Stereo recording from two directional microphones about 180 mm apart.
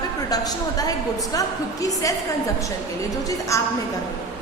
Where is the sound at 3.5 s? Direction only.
15° left (ahead or behind).